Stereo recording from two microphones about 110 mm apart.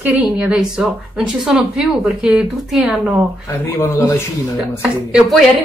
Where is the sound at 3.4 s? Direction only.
25° left (ahead or behind).